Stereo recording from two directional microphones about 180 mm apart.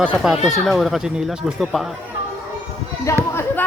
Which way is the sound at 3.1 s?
15° left (ahead or behind).